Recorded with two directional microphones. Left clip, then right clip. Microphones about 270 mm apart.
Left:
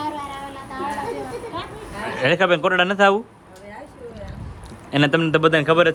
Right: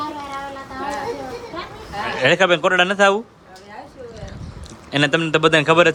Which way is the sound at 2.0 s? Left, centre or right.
Centre.